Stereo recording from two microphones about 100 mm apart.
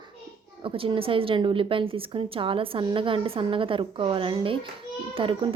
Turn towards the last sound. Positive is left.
turn(degrees=-60)  # may be behind; listen again after turning